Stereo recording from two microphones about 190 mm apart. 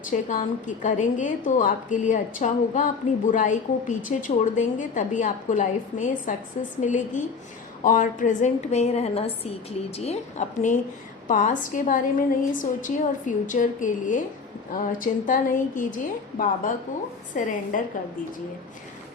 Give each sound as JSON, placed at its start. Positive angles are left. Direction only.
{"t": 0.0, "sound": "a woman's voice", "side_deg": 40}